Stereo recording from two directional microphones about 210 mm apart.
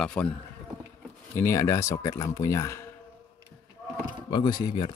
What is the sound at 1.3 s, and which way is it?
Speech, 15° left (ahead or behind).